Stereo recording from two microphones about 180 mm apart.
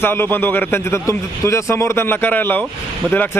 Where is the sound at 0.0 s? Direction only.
10° left (ahead or behind).